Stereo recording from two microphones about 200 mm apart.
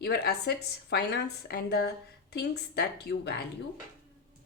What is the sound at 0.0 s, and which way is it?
A woman's voice, 55° left (ahead or behind).